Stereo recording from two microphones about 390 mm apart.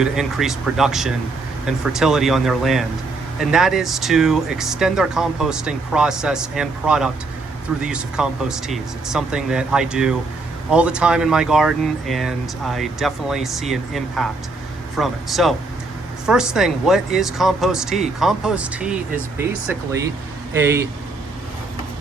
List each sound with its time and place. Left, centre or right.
0.0 s speech: centre
20.5 s speech: centre